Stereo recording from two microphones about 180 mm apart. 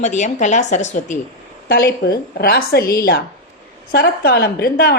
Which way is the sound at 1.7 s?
60° left (ahead or behind).